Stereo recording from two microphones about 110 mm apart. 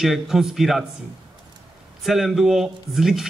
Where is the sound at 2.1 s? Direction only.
Centre (ahead or behind).